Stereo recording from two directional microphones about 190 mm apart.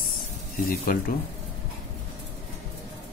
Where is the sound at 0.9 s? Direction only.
50° left (ahead or behind).